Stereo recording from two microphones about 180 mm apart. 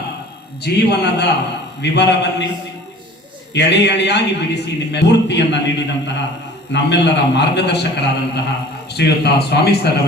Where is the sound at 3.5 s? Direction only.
75° left (ahead or behind).